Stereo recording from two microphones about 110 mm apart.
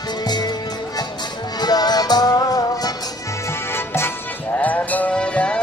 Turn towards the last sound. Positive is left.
turn(degrees=10)  # may be behind; listen again after turning